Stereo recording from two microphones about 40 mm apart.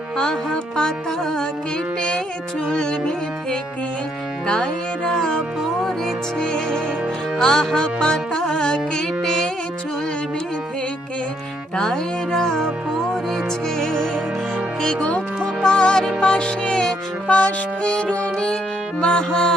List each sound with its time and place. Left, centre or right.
0.2 s music: centre
2.6 s music: centre
6.4 s music: centre
9.2 s music: centre
11.8 s music: centre
12.5 s music: centre; by 16.0 s left
16.0 s music: centre
16.4 s music: left
17.2 s music: left